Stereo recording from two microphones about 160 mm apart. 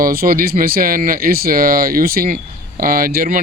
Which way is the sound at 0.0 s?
65° right (ahead or behind).